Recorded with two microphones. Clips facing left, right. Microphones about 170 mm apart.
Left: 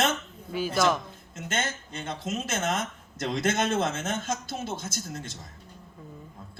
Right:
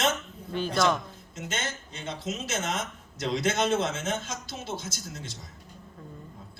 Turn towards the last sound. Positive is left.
turn(degrees=50)  # may be behind; listen again after turning